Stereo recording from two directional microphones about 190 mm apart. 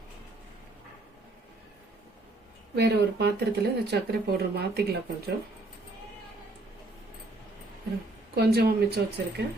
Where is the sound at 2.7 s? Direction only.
60° right (ahead or behind).